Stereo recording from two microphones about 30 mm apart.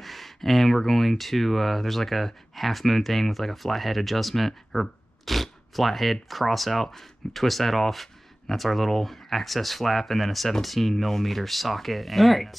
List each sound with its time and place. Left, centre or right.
0.0 s speech: centre